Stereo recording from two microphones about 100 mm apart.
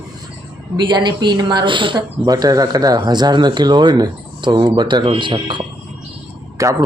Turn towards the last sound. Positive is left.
turn(degrees=-35)  # may be behind; listen again after turning